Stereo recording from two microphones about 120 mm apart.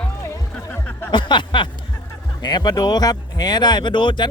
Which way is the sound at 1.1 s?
40° left (ahead or behind).